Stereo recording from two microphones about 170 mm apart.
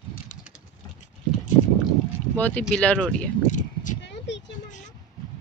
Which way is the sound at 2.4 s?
10° left (ahead or behind).